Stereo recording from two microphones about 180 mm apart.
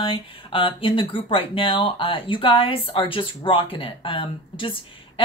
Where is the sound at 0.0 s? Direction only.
30° left (ahead or behind).